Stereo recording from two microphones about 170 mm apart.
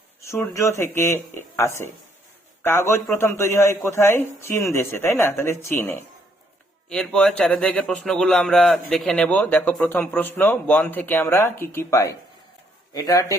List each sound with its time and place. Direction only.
0.2 s a man's voice: 15° left (ahead or behind)
2.6 s a man's voice: 15° left (ahead or behind)